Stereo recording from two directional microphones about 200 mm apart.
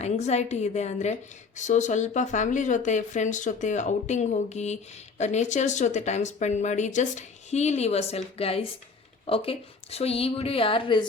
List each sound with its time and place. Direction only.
0.0 s a woman's voice: 35° left (ahead or behind)